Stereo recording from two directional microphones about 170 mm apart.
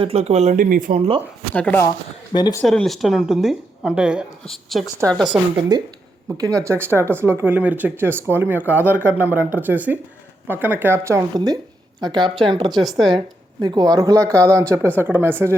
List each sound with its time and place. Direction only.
0.0 s speech: 35° right (ahead or behind); by 1.0 s 55° right (ahead or behind)
1.5 s speech: 10° left (ahead or behind)
2.3 s speech: 25° left (ahead or behind)
2.6 s speech: centre (ahead or behind)
5.7 s speech: 25° right (ahead or behind)
12.9 s speech: centre (ahead or behind)
13.1 s speech: 25° right (ahead or behind)